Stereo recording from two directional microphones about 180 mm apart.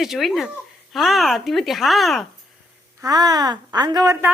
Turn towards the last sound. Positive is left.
turn(degrees=-15)  # may be behind; listen again after turning